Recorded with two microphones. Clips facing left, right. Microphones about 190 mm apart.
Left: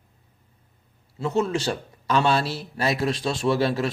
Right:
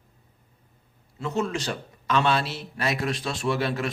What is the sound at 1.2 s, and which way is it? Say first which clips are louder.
Speech: left 4 dB; 30° left (ahead or behind).